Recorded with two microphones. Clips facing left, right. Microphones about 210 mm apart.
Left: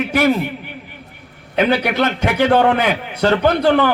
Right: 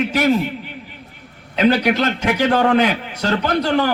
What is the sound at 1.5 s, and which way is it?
A man's voice, 60° left (ahead or behind).